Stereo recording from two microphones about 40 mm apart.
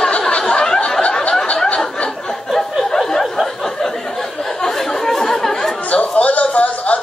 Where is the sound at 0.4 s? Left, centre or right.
Centre.